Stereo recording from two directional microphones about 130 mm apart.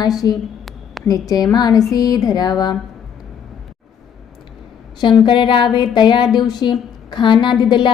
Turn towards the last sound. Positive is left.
turn(degrees=35)  # may be behind; listen again after turning